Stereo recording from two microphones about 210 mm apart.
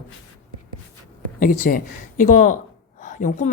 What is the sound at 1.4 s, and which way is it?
A woman's voice, 40° left (ahead or behind).